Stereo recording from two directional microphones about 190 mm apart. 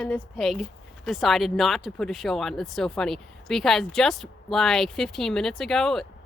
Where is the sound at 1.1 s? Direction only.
Centre (ahead or behind).